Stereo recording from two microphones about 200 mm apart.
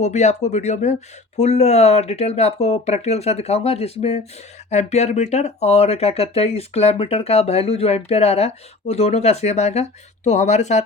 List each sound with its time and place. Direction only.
0.0 s speech: 35° left (ahead or behind)